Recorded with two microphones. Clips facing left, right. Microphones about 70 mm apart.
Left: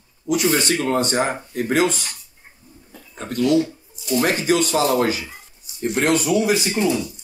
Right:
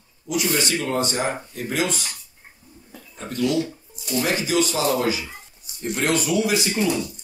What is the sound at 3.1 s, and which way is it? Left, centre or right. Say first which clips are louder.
Speech: left 5 dB; left.